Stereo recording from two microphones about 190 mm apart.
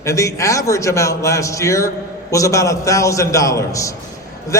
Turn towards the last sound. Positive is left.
turn(degrees=15)  # may be behind; listen again after turning